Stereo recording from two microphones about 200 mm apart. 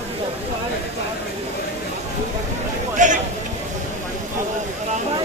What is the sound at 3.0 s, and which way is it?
Speech, 40° right (ahead or behind).